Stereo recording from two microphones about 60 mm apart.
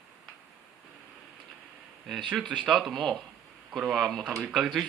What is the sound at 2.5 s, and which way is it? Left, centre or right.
Speech, centre.